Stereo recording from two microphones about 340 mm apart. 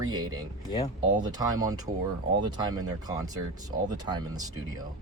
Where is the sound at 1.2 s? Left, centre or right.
Centre.